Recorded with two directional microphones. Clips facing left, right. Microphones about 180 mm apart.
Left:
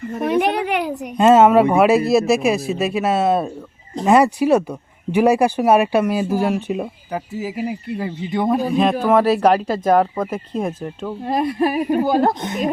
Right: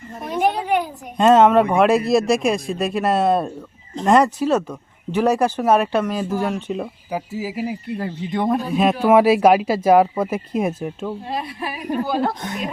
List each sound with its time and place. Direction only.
0.2 s a woman's voice: 70° left (ahead or behind)
1.1 s speech: 5° left (ahead or behind)
7.1 s speech: centre (ahead or behind)
11.3 s speech: 45° left (ahead or behind)
12.3 s speech: 20° left (ahead or behind)